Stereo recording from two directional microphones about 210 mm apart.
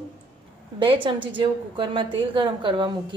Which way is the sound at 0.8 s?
25° right (ahead or behind).